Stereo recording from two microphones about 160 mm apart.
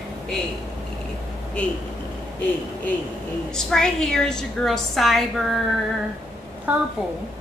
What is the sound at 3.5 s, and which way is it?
A woman's voice, 5° left (ahead or behind).